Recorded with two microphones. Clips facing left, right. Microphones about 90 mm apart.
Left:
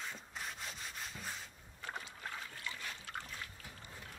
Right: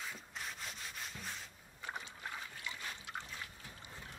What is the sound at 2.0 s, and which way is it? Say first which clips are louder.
Boat: even; 15° right (ahead or behind).